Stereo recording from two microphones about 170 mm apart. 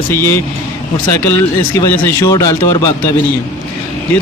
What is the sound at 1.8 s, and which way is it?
Speech, 10° left (ahead or behind).